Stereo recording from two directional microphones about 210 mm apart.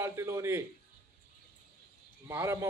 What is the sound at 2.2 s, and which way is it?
Speech, 15° right (ahead or behind).